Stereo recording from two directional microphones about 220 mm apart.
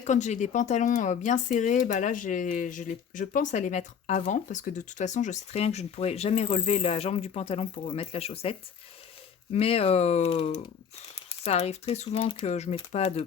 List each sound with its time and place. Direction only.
0.0 s speech: 30° left (ahead or behind)